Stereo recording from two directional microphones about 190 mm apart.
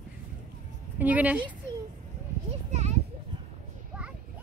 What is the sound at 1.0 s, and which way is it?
Speech, 10° right (ahead or behind).